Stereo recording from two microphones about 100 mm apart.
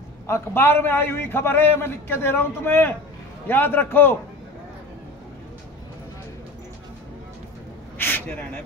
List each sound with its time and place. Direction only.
0.3 s a man's voice: 25° left (ahead or behind)
8.0 s gasp: 20° left (ahead or behind)